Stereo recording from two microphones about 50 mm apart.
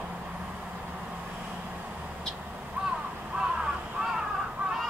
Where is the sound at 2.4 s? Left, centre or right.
Right.